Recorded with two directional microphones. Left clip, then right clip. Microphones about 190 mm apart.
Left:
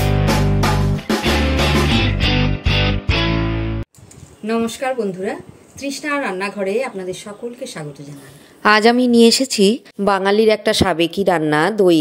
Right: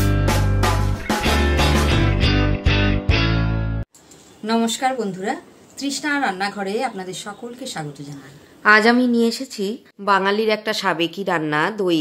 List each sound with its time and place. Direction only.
0.0 s music: centre (ahead or behind)
4.5 s a woman's voice: 15° right (ahead or behind)
8.6 s speech: 35° left (ahead or behind)